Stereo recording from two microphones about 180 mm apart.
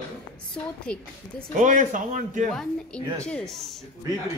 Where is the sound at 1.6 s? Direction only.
45° right (ahead or behind).